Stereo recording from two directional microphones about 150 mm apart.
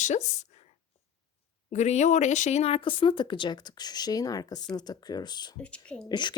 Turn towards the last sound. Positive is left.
turn(degrees=30)  # may be behind; listen again after turning